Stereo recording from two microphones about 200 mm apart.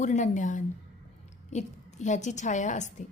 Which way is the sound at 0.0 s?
40° left (ahead or behind).